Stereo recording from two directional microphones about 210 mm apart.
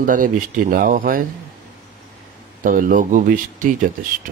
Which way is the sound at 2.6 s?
40° right (ahead or behind).